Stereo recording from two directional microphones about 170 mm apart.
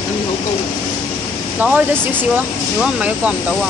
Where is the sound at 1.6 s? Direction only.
5° right (ahead or behind).